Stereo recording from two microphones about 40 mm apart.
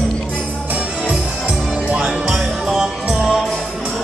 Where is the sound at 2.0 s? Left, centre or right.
Centre.